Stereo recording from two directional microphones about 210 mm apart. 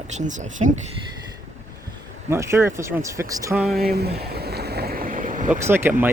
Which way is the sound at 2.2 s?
15° right (ahead or behind).